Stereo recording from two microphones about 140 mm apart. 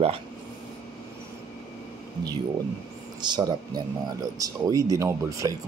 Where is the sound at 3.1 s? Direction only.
30° right (ahead or behind).